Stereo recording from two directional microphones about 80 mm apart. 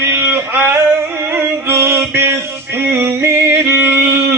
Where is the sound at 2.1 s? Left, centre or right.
Right.